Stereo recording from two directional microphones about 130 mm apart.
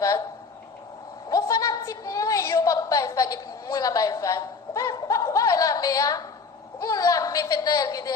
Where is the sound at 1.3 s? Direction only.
25° left (ahead or behind).